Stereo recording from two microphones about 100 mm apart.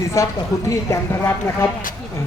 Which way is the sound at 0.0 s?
30° left (ahead or behind).